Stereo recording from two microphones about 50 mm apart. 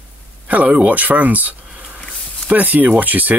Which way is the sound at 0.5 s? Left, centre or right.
Right.